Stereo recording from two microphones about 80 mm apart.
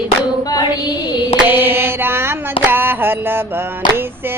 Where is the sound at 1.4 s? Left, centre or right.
Right.